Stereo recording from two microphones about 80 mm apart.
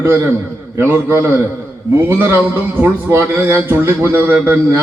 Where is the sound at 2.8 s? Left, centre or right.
Right.